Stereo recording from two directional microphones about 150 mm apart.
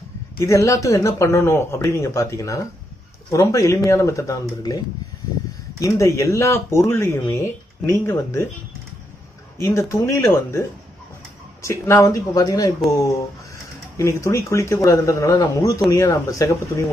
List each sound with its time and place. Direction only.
0.4 s speech: 20° left (ahead or behind)
9.6 s speech: 20° left (ahead or behind)
11.6 s speech: 20° left (ahead or behind)
13.9 s speech: 20° left (ahead or behind)